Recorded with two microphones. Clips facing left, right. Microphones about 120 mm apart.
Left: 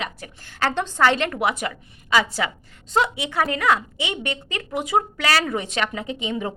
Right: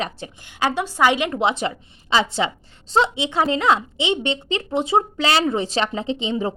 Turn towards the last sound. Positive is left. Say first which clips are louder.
# right 4 dB
turn(degrees=-25)  # may be behind; listen again after turning